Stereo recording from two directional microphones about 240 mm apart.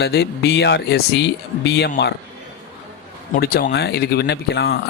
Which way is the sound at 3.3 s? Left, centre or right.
Left.